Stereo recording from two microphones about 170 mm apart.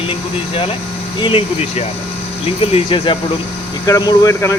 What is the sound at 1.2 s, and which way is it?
Speech, 30° left (ahead or behind).